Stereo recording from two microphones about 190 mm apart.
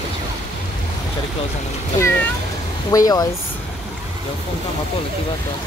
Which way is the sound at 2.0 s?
15° left (ahead or behind).